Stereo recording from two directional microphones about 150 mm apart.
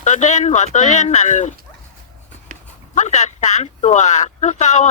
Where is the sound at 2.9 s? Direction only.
50° left (ahead or behind).